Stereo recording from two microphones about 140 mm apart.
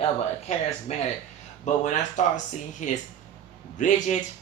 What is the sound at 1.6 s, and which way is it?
A man's voice, 60° left (ahead or behind).